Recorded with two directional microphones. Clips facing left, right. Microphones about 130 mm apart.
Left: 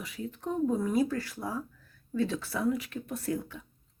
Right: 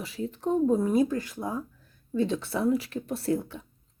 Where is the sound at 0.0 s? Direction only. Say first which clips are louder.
Right 6 dB; 30° right (ahead or behind).